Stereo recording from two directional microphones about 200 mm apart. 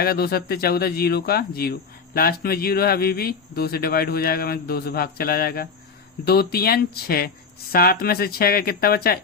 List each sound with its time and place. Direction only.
0.0 s speech: 50° left (ahead or behind)